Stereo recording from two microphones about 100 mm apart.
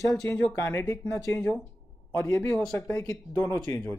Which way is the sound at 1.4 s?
10° left (ahead or behind).